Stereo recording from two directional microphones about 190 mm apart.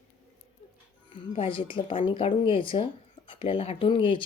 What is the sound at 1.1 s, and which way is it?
Speech, 25° left (ahead or behind).